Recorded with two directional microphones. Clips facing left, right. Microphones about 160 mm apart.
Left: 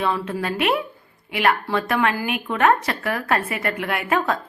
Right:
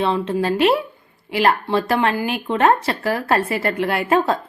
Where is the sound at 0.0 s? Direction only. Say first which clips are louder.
Right 4 dB; 25° right (ahead or behind).